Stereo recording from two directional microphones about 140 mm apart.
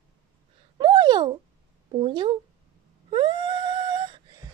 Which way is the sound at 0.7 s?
30° right (ahead or behind).